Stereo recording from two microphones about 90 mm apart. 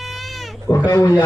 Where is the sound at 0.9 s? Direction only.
35° left (ahead or behind).